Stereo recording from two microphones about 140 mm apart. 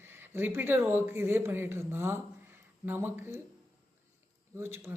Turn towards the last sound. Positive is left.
turn(degrees=-20)  # may be behind; listen again after turning